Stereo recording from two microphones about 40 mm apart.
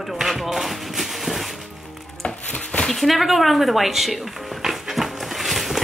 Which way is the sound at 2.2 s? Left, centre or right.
Left.